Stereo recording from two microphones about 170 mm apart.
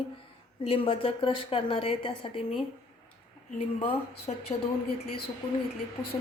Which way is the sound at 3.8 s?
35° left (ahead or behind).